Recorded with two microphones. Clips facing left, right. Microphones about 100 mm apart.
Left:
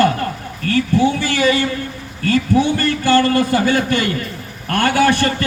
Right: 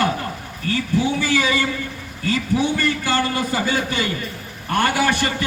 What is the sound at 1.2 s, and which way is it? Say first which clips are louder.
A man's voice: left 4 dB; 60° left (ahead or behind).